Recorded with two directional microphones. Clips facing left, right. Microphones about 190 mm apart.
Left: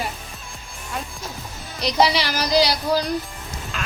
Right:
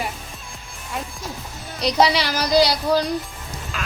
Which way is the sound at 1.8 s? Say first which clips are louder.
Right 1 dB; centre (ahead or behind).